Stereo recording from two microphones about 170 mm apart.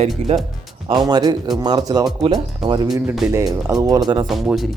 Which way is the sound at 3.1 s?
10° right (ahead or behind).